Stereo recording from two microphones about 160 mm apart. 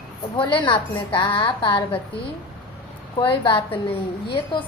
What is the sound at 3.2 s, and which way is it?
Speech, 30° left (ahead or behind).